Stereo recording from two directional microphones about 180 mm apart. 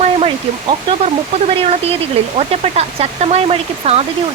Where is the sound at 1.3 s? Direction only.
30° right (ahead or behind).